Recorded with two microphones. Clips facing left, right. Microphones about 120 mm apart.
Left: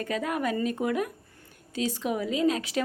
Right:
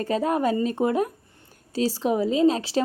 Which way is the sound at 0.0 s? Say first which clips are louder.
Right 6 dB; 35° right (ahead or behind).